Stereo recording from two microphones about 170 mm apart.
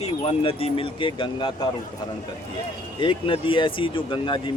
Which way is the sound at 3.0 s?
30° left (ahead or behind).